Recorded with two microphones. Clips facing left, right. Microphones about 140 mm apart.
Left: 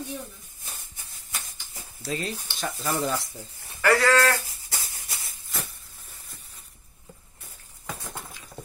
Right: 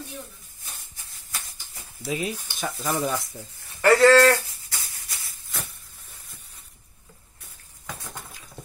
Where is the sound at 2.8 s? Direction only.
15° right (ahead or behind).